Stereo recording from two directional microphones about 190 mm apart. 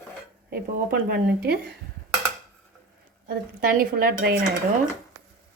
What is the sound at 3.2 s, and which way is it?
Speech, 50° right (ahead or behind).